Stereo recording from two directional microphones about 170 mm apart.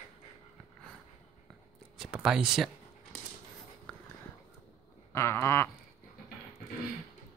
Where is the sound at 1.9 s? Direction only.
5° right (ahead or behind).